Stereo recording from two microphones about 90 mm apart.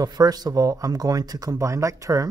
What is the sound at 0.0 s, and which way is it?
Speech, 45° right (ahead or behind).